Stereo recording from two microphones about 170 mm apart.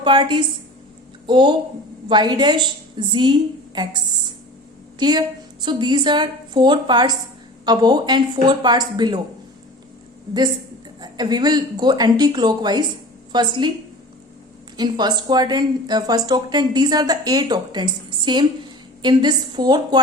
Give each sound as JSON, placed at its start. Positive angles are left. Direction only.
{"t": 0.0, "sound": "speech", "side_deg": -30}
{"t": 11.0, "sound": "speech", "side_deg": -25}
{"t": 14.8, "sound": "speech", "side_deg": -25}